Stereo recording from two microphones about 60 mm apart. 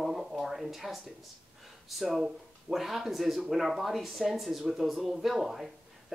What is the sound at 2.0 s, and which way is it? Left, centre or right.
Speech, centre.